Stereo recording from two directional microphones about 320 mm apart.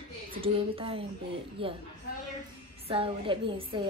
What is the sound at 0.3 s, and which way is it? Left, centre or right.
A woman's voice, centre.